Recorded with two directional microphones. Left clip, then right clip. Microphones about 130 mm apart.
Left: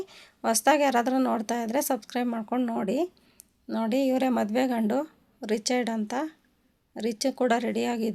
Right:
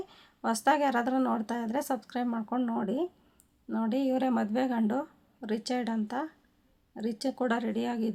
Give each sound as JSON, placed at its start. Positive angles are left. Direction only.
{"t": 0.1, "sound": "a woman's voice", "side_deg": 20}